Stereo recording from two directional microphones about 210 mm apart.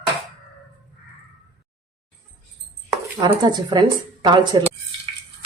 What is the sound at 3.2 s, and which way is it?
A woman's voice, 20° right (ahead or behind).